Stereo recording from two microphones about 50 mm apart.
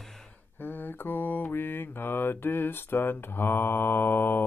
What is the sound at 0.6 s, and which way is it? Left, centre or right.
Mantra, left.